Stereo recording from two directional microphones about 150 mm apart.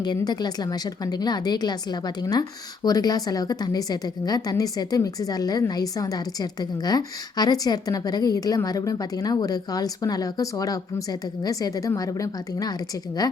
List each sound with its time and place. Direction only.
0.0 s a woman's voice: 25° left (ahead or behind)